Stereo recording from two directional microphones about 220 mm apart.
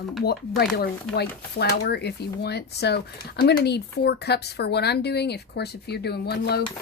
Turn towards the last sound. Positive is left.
turn(degrees=50)  # may be behind; listen again after turning